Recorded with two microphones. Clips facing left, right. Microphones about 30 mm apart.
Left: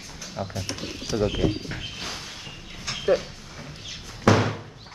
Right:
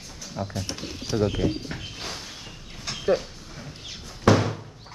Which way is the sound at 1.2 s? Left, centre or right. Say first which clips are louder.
Left 1 dB; centre.